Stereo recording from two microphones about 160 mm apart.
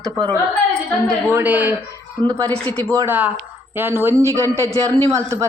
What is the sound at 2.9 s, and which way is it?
A man's voice, 15° right (ahead or behind).